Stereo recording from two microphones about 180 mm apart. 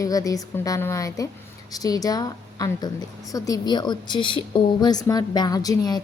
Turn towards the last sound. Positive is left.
turn(degrees=20)  # may be behind; listen again after turning